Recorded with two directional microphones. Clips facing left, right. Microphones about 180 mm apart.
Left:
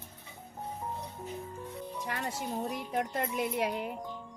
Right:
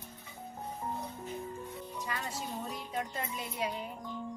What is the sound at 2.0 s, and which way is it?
Music, 60° left (ahead or behind).